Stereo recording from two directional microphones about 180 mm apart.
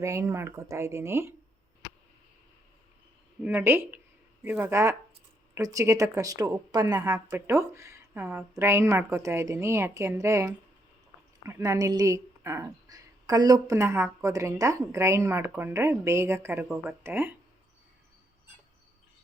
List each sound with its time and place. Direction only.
0.0 s speech: 15° right (ahead or behind)
3.4 s speech: 10° right (ahead or behind)